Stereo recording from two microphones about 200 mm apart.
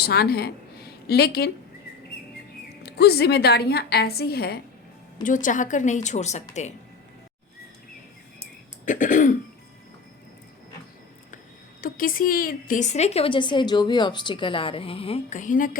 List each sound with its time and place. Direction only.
0.0 s a woman's voice: 50° left (ahead or behind)
2.8 s a woman's voice: 55° left (ahead or behind)
5.2 s a woman's voice: 40° left (ahead or behind)
8.8 s throat clearing: 40° left (ahead or behind)
11.8 s a woman's voice: 45° left (ahead or behind)